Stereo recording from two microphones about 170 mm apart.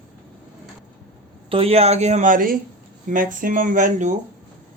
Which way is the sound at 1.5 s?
35° right (ahead or behind).